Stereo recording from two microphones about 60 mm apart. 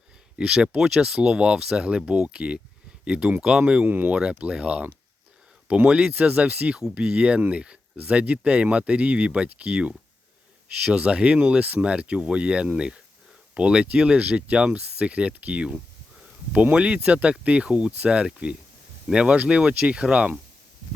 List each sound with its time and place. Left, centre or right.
0.3 s speech: centre
3.8 s speech: right
4.1 s speech: centre